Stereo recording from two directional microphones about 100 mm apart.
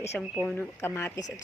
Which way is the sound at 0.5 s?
25° left (ahead or behind).